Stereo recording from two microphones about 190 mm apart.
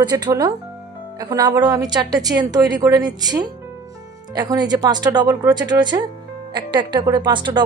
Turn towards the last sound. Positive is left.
turn(degrees=-25)  # may be behind; listen again after turning